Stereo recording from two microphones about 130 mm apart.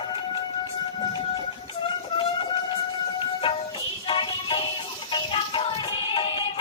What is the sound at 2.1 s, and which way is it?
Train, 40° left (ahead or behind).